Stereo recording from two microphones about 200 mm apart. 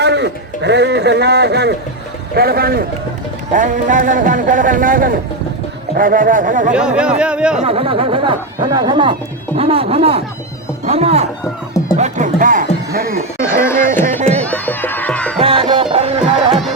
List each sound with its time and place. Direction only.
0.0 s speech: 60° right (ahead or behind); by 6.7 s 40° right (ahead or behind)
6.7 s speech: 5° right (ahead or behind)
7.6 s speech: 30° right (ahead or behind)
11.9 s music: 35° right (ahead or behind)
13.6 s music: 10° left (ahead or behind)
15.4 s music: 30° right (ahead or behind)
16.5 s music: centre (ahead or behind)